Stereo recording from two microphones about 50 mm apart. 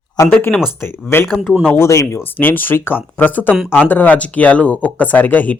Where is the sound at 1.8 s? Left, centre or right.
Left.